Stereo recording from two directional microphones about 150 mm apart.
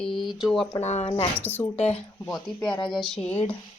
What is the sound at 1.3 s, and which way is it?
Speech, 15° left (ahead or behind).